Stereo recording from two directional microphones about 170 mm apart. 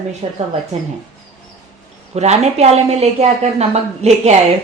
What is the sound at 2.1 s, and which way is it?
A woman's voice, 40° right (ahead or behind).